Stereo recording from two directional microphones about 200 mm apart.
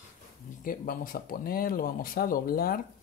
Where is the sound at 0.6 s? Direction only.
45° left (ahead or behind).